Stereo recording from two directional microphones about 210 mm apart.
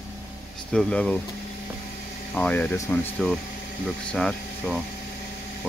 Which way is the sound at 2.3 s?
10° left (ahead or behind).